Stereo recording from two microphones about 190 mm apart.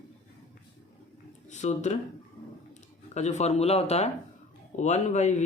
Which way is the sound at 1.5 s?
40° left (ahead or behind).